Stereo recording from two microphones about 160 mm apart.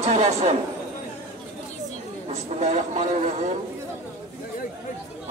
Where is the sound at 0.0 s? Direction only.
40° right (ahead or behind).